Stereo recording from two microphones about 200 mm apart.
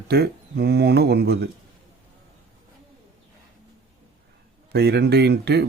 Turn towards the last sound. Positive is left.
turn(degrees=-55)  # may be behind; listen again after turning